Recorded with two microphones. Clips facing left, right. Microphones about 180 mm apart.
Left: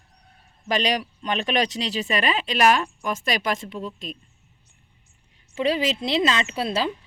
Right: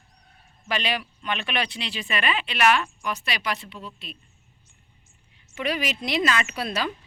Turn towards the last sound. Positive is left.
turn(degrees=25)  # may be behind; listen again after turning